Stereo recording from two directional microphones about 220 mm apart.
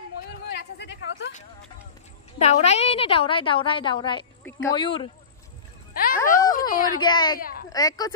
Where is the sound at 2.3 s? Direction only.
30° left (ahead or behind).